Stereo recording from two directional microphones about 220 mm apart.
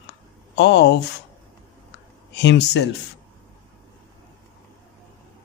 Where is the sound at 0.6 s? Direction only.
50° left (ahead or behind).